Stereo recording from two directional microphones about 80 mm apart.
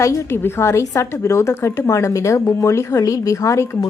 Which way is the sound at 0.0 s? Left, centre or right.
Left.